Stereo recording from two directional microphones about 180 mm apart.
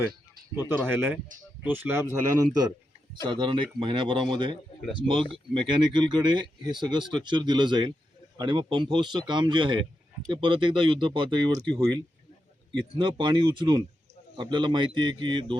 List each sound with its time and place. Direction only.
0.5 s speech: 10° right (ahead or behind)
2.3 s speech: 20° right (ahead or behind)
12.7 s speech: 25° right (ahead or behind)